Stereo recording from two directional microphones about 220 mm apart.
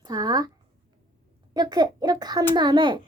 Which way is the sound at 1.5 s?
20° right (ahead or behind).